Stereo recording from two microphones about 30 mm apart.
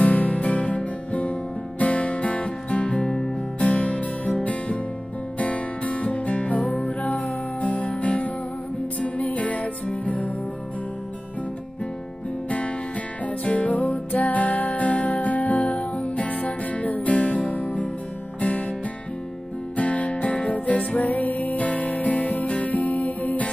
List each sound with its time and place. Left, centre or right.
0.0 s music: left
5.4 s music: left
12.4 s music: left
19.8 s music: left
21.1 s music: left